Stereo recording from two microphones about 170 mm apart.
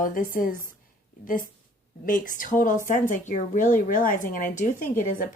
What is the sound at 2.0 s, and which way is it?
Speech, 55° left (ahead or behind).